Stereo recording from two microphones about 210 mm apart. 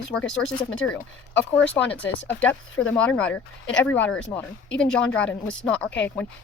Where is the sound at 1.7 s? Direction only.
5° left (ahead or behind).